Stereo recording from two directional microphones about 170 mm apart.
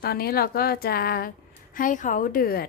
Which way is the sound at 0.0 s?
65° left (ahead or behind).